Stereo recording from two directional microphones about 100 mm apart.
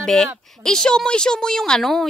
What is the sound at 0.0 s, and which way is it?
A woman's voice, 5° left (ahead or behind).